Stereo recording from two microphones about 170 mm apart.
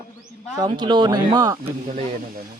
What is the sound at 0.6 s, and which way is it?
Speech, 25° right (ahead or behind).